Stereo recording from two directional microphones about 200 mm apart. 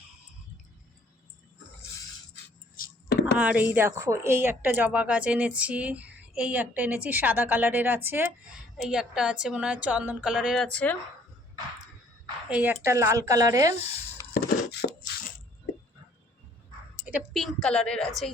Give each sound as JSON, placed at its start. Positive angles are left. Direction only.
{"t": 2.3, "sound": "a sound", "side_deg": 50}
{"t": 3.3, "sound": "a woman's voice", "side_deg": -5}
{"t": 12.5, "sound": "a woman's voice", "side_deg": -5}
{"t": 14.3, "sound": "chopping", "side_deg": 55}
{"t": 17.1, "sound": "a woman's voice", "side_deg": -5}